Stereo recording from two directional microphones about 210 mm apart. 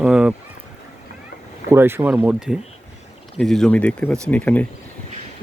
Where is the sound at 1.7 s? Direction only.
10° right (ahead or behind); by 4.6 s 5° left (ahead or behind).